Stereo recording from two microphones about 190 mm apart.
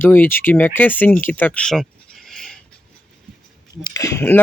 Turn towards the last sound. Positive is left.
turn(degrees=15)  # may be behind; listen again after turning